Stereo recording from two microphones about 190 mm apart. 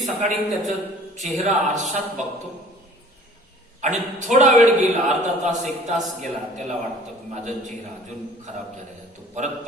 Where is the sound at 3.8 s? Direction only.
40° right (ahead or behind).